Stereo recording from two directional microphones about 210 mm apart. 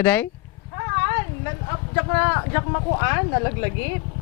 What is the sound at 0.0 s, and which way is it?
Speech, 10° left (ahead or behind).